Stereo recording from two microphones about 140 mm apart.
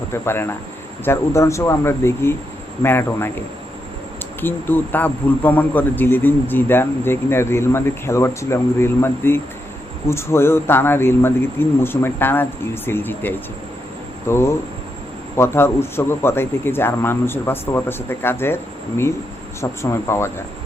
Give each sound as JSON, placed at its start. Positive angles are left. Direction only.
{"t": 0.1, "sound": "a man's voice", "side_deg": 15}
{"t": 4.4, "sound": "a man's voice", "side_deg": 15}